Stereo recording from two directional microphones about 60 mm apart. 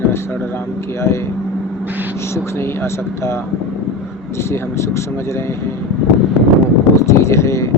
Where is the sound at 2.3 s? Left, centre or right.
Left.